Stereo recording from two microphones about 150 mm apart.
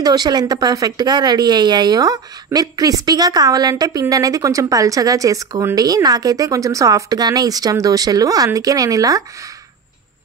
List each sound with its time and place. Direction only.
0.0 s speech: 25° right (ahead or behind)